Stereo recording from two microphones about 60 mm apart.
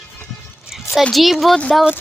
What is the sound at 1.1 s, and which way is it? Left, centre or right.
Speech, centre.